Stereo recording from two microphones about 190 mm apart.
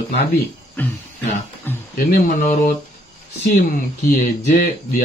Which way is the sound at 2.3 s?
45° left (ahead or behind).